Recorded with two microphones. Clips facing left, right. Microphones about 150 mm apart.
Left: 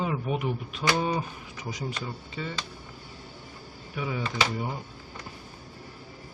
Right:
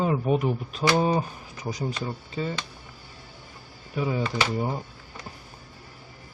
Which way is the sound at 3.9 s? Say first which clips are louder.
Right 5 dB; 35° right (ahead or behind).